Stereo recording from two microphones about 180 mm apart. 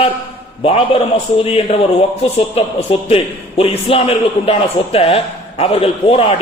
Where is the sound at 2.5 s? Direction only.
35° left (ahead or behind).